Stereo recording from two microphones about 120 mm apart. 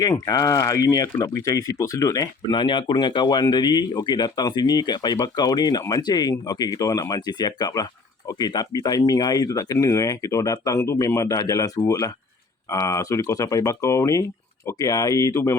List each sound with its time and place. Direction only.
0.0 s speech: 30° left (ahead or behind)
2.4 s speech: 40° left (ahead or behind); by 15.5 s 25° left (ahead or behind)